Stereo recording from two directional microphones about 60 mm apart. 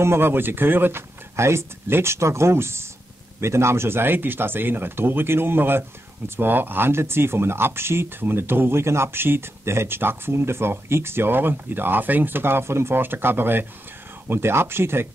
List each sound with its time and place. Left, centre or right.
0.0 s speech: right
1.3 s speech: right